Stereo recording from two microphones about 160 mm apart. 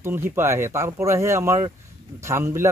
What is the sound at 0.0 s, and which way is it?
A man's voice, 15° right (ahead or behind).